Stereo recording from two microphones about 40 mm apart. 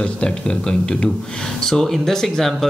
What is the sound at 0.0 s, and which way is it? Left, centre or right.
Speech, left.